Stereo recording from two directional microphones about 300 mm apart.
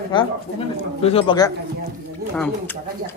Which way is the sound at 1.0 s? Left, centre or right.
Centre.